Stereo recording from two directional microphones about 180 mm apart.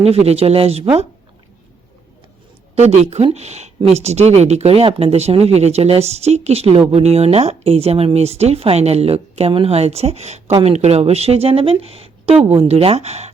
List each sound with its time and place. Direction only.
0.0 s speech: 35° right (ahead or behind)
2.7 s speech: 35° right (ahead or behind)